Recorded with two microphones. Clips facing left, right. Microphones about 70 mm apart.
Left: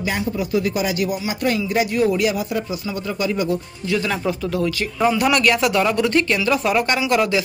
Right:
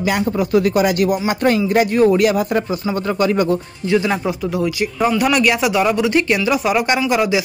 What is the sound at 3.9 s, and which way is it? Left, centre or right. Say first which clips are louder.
Speech: right 4 dB; centre.